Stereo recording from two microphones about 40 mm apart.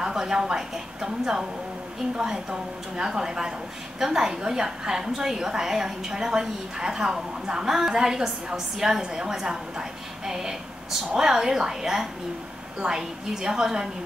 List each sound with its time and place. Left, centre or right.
0.0 s a woman's voice: centre